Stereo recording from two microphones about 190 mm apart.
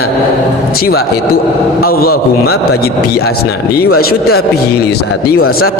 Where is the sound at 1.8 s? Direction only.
50° left (ahead or behind).